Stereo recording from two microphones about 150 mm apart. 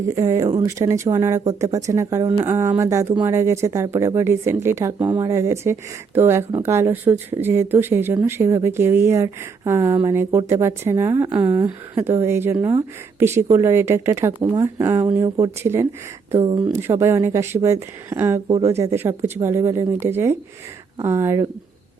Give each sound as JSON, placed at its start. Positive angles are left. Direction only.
{"t": 0.2, "sound": "a woman's voice", "side_deg": -20}
{"t": 16.3, "sound": "speech", "side_deg": -40}
{"t": 16.7, "sound": "speech", "side_deg": -15}